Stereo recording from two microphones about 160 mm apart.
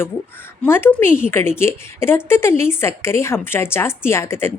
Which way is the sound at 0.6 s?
10° left (ahead or behind).